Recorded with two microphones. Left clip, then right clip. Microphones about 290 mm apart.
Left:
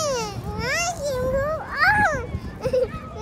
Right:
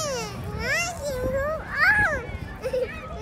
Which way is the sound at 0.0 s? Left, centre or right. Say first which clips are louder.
Left 4 dB; centre.